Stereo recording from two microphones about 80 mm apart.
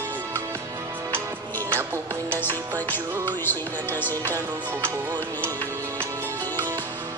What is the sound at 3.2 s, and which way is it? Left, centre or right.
Music, left.